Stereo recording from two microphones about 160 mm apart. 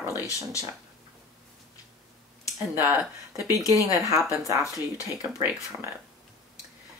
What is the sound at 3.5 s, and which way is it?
Speech, 20° left (ahead or behind).